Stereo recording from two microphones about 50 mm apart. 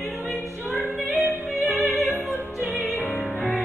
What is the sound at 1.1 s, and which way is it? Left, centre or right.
Music, right.